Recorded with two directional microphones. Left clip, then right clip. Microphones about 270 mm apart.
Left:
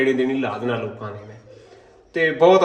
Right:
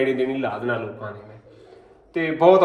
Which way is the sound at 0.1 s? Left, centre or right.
Centre.